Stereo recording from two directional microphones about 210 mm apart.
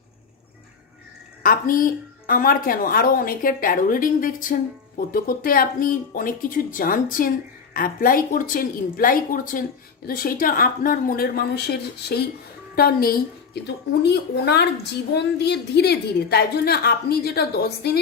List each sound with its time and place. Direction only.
1.4 s a woman's voice: 40° left (ahead or behind)